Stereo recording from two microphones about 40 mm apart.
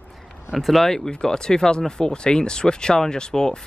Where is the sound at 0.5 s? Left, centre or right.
Centre.